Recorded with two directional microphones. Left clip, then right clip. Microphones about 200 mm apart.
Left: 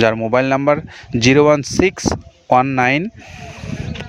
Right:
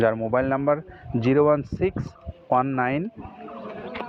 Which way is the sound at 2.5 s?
80° left.